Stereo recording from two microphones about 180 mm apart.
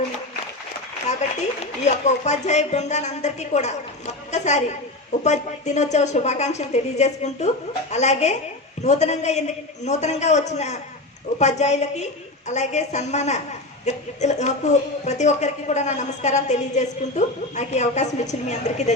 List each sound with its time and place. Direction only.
1.8 s speech: 40° left (ahead or behind)